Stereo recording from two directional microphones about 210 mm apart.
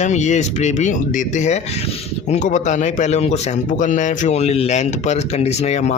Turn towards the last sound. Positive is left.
turn(degrees=30)  # may be behind; listen again after turning